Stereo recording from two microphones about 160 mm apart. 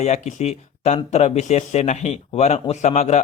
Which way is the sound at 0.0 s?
45° left (ahead or behind).